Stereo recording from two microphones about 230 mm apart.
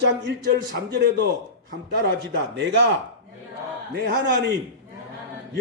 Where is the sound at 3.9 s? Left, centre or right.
Right.